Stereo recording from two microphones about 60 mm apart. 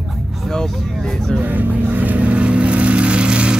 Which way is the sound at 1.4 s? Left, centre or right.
Right.